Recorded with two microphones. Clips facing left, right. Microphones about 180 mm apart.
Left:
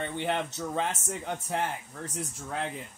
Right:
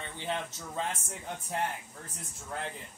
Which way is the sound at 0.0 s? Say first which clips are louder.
Left 6 dB; 65° left (ahead or behind).